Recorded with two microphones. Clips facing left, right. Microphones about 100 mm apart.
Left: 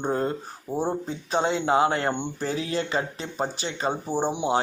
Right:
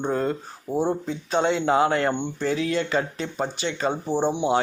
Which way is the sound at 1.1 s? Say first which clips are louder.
Right 2 dB; 30° left (ahead or behind).